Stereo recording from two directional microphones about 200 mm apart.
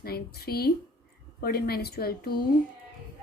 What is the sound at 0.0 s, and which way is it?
A woman's voice, 50° left (ahead or behind).